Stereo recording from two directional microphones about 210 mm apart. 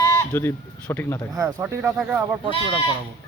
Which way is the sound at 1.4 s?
15° right (ahead or behind).